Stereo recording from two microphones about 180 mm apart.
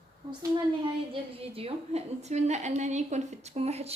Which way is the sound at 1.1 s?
30° right (ahead or behind).